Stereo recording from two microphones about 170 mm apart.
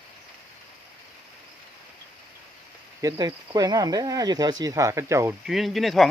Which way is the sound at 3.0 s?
20° right (ahead or behind).